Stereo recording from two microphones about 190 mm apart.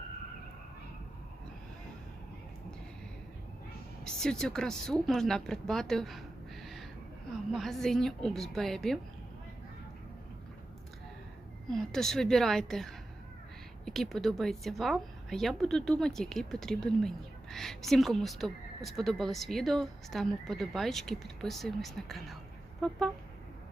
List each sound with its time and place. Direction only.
4.0 s a woman's voice: 5° left (ahead or behind)
11.7 s a woman's voice: 5° left (ahead or behind)